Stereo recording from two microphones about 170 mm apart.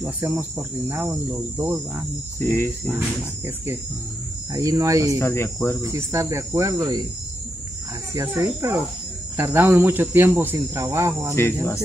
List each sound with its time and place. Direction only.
0.0 s cricket: 10° right (ahead or behind)
2.3 s cricket: 15° left (ahead or behind)
3.4 s cricket: 15° right (ahead or behind)
4.5 s speech: 20° right (ahead or behind)
5.2 s cricket: 15° left (ahead or behind)
5.8 s cricket: 15° right (ahead or behind)
8.1 s cricket: 15° right (ahead or behind)